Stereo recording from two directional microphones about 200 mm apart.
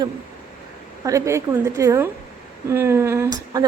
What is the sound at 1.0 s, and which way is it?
A woman's voice, 15° right (ahead or behind).